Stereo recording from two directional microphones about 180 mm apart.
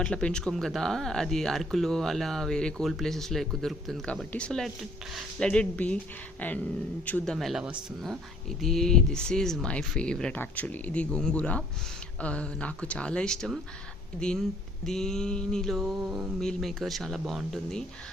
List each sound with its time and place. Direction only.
0.0 s speech: 5° left (ahead or behind)